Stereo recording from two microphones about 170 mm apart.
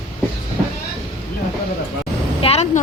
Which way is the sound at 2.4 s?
40° left (ahead or behind).